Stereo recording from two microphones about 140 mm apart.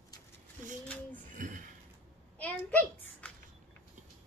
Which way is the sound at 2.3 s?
10° left (ahead or behind).